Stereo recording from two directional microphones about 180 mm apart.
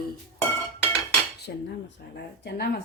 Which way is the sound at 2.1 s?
65° left (ahead or behind).